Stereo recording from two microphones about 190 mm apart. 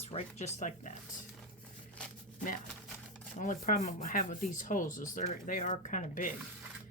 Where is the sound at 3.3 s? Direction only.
40° left (ahead or behind).